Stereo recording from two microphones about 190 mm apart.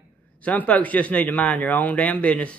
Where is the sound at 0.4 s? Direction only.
10° left (ahead or behind).